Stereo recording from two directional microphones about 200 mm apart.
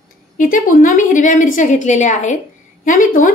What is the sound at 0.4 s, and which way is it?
A woman's voice, 45° left (ahead or behind).